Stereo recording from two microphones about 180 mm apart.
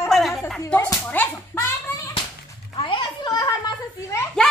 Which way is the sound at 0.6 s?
15° left (ahead or behind).